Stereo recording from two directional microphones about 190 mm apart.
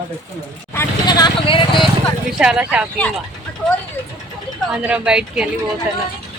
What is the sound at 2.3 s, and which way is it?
Speech, 5° right (ahead or behind).